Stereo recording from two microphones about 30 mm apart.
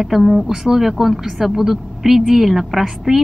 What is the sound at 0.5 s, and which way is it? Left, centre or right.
A woman's voice, centre.